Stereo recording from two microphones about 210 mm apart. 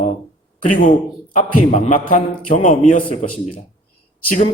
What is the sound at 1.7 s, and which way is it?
A man's voice, 35° left (ahead or behind).